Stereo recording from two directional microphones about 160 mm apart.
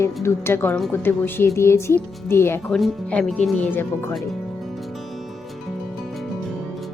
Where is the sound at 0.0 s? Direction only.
15° left (ahead or behind).